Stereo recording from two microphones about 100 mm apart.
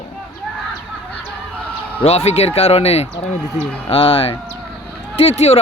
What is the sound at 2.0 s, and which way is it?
Speech, 90° left.